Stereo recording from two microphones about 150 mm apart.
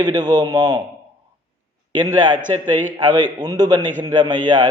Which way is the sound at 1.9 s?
30° right (ahead or behind).